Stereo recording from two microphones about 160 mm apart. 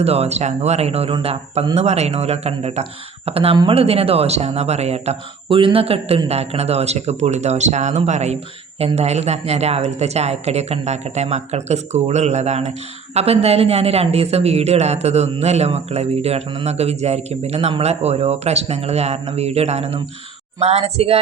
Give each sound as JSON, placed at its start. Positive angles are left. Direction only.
{"t": 0.0, "sound": "a woman's voice", "side_deg": -40}